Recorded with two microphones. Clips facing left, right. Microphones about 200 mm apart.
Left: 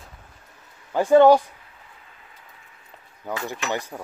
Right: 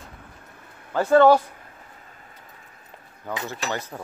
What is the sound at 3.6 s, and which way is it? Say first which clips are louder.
Speech: left 2 dB; 35° right (ahead or behind).